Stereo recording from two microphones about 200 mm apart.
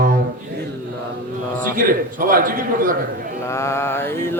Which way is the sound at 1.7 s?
45° right (ahead or behind).